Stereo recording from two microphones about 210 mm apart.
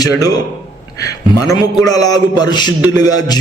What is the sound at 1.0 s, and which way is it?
A man's voice, 15° left (ahead or behind).